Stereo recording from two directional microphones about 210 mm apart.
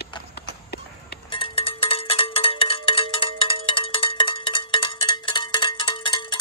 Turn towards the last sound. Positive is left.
turn(degrees=25)  # may be behind; listen again after turning